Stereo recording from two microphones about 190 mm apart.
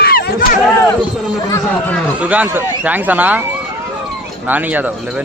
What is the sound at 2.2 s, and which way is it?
Speech, 10° right (ahead or behind).